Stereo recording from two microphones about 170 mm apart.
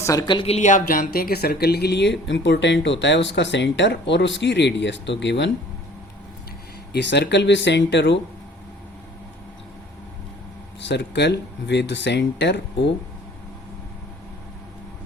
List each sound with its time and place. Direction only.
0.0 s speech: 20° left (ahead or behind); by 5.5 s 90° left
6.9 s speech: 90° left
10.8 s speech: 90° left